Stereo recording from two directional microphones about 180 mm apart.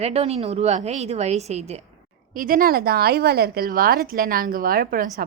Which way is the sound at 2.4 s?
50° right (ahead or behind).